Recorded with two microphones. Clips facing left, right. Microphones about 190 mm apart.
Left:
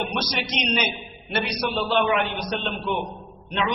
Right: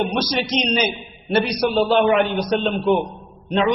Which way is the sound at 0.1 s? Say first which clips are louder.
Right 6 dB; 35° right (ahead or behind).